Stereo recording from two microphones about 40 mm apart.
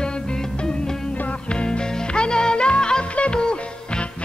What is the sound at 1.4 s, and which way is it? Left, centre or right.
Music, left.